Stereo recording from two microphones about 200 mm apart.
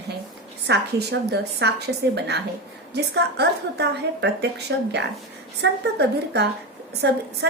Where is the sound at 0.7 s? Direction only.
55° right (ahead or behind).